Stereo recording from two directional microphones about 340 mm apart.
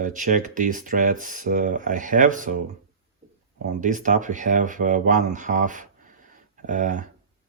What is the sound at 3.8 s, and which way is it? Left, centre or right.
Speech, right.